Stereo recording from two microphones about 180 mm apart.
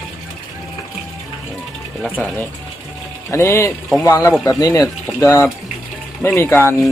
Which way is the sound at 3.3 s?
15° left (ahead or behind).